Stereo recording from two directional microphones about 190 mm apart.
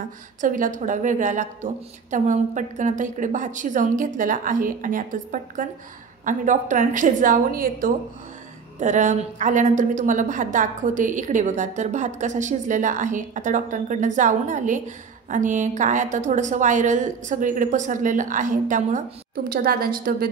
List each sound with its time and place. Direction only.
0.4 s a woman's voice: 45° right (ahead or behind)